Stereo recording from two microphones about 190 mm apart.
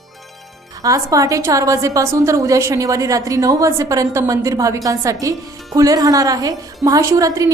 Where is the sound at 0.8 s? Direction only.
15° right (ahead or behind).